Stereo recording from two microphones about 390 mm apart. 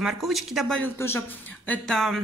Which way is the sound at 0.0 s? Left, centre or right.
Centre.